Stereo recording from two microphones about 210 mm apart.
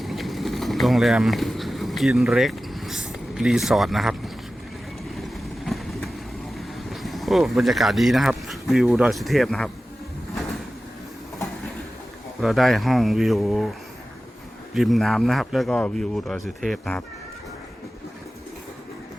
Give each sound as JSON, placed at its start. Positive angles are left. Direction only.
{"t": 0.0, "sound": "a sound", "side_deg": 0}
{"t": 5.6, "sound": "vehicle", "side_deg": 0}
{"t": 6.9, "sound": "speech", "side_deg": 0}
{"t": 12.4, "sound": "speech", "side_deg": 0}
{"t": 14.7, "sound": "speech", "side_deg": 0}